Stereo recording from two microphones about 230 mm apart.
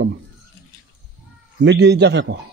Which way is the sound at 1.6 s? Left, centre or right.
Right.